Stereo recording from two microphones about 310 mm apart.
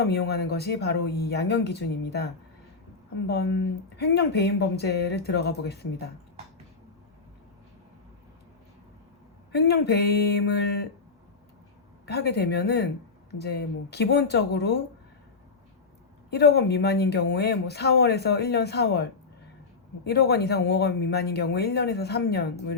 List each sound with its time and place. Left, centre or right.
0.0 s speech: left
3.2 s speech: left
9.5 s speech: left
12.0 s speech: left
16.3 s speech: left
20.1 s speech: left